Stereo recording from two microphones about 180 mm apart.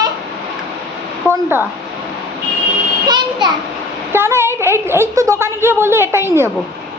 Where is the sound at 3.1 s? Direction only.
25° right (ahead or behind).